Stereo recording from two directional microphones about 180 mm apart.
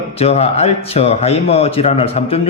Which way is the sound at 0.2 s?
35° left (ahead or behind).